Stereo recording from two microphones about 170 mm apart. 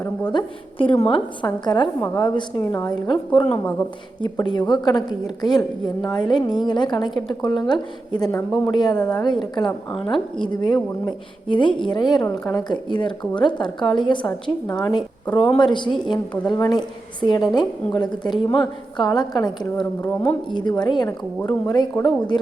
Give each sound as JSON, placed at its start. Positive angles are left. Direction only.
{"t": 0.3, "sound": "a woman's voice", "side_deg": 30}
{"t": 8.3, "sound": "speech", "side_deg": 15}
{"t": 8.7, "sound": "a woman's voice", "side_deg": 25}
{"t": 15.3, "sound": "speech", "side_deg": 5}
{"t": 15.5, "sound": "a woman's voice", "side_deg": 25}
{"t": 20.1, "sound": "speech", "side_deg": 10}
{"t": 20.5, "sound": "a woman's voice", "side_deg": 25}